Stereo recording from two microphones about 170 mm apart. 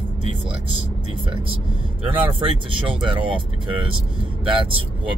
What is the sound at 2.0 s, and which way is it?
Speech, 35° right (ahead or behind).